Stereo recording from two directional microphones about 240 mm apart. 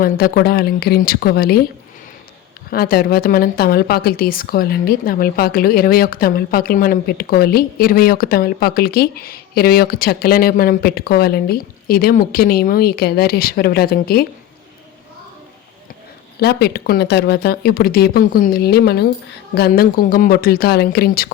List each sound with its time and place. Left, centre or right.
0.0 s a woman's voice: left
2.6 s a woman's voice: left
16.4 s a woman's voice: left